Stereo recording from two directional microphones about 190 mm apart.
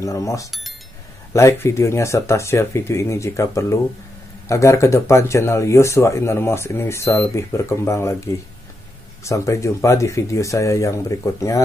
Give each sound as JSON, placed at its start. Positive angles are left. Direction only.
{"t": 0.0, "sound": "speech", "side_deg": 15}
{"t": 9.2, "sound": "speech", "side_deg": 15}